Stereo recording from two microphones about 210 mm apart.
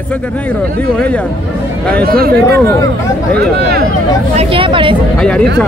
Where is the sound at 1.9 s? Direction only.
45° right (ahead or behind).